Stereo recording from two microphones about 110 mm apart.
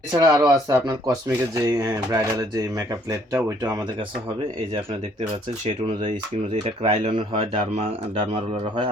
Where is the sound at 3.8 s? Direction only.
50° right (ahead or behind).